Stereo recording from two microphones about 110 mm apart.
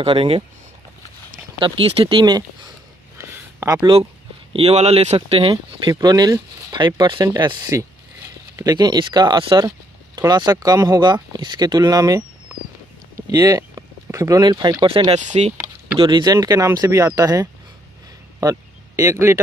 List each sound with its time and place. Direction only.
0.0 s speech: 55° right (ahead or behind)
1.6 s speech: 50° right (ahead or behind)
3.2 s a sound: 25° right (ahead or behind)
4.5 s speech: 65° right (ahead or behind)
5.9 s speech: 40° right (ahead or behind)
10.1 s speech: 35° right (ahead or behind)
13.1 s a sound: 35° right (ahead or behind)
14.4 s speech: 40° right (ahead or behind)
15.0 s speech: 85° right
16.0 s speech: 45° right (ahead or behind); by 19.4 s 25° right (ahead or behind)